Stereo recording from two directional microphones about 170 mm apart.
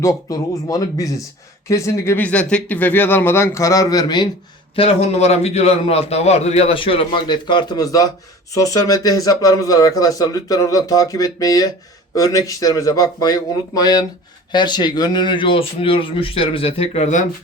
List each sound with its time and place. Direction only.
0.0 s a man's voice: 20° left (ahead or behind)
4.7 s a man's voice: 35° left (ahead or behind)